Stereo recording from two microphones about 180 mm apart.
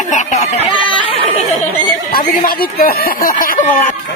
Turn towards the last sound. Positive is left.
turn(degrees=50)  # may be behind; listen again after turning